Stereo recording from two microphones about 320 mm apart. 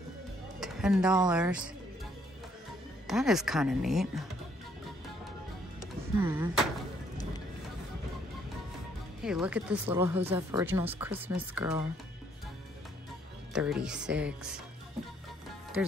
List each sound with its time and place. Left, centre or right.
0.6 s music: centre
1.1 s speech: centre
3.1 s speech: centre
5.8 s music: centre
9.2 s speech: centre
13.5 s speech: centre